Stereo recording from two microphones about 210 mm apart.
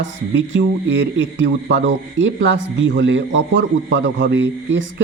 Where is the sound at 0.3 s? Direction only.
60° right (ahead or behind).